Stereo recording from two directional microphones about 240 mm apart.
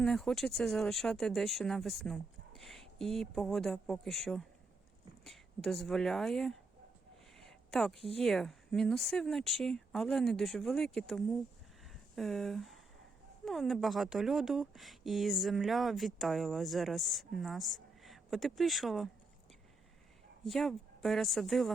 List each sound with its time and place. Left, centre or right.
0.0 s speech: centre
7.3 s a sound: centre
7.9 s a woman's voice: right
8.2 s speech: centre
20.4 s speech: centre